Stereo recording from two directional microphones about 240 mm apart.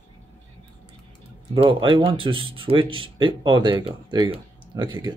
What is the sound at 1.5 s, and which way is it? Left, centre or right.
Speech, right.